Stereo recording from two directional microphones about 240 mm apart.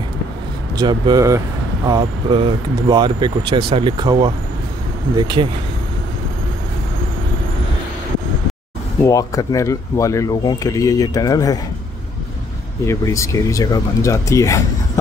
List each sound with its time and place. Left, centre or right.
0.7 s speech: centre
9.0 s speech: centre
12.8 s speech: centre